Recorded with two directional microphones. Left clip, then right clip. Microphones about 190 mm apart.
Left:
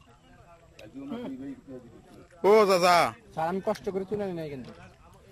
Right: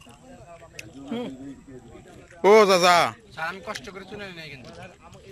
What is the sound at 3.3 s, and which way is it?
Speech, 30° left (ahead or behind).